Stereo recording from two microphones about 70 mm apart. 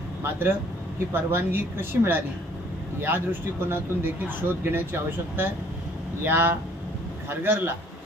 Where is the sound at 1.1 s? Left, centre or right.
Right.